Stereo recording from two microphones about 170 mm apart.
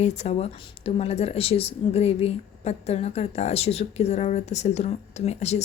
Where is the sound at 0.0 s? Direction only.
40° left (ahead or behind).